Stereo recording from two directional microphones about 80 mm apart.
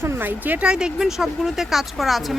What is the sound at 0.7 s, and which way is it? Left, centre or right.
Speech, centre.